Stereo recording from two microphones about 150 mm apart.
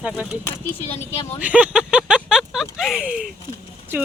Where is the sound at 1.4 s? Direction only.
10° right (ahead or behind).